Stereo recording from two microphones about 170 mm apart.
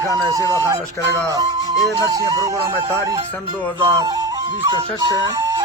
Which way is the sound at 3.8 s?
25° right (ahead or behind).